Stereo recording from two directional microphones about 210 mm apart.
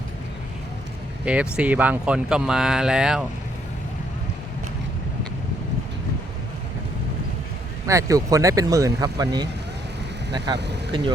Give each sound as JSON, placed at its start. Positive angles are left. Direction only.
{"t": 1.2, "sound": "speech", "side_deg": -5}
{"t": 7.9, "sound": "speech", "side_deg": -15}
{"t": 10.5, "sound": "speech", "side_deg": -55}